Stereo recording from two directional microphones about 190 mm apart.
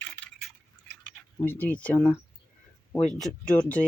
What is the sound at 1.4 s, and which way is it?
Speech, 10° left (ahead or behind).